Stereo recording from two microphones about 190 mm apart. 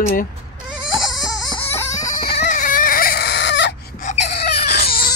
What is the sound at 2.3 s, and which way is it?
Baby cry, 40° left (ahead or behind).